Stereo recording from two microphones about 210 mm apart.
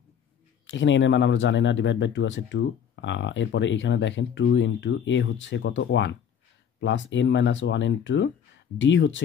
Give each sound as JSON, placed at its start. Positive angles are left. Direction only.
{"t": 0.7, "sound": "speech", "side_deg": 60}